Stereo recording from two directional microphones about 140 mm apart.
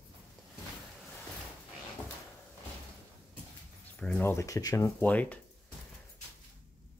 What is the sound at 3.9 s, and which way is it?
Speech, 10° left (ahead or behind).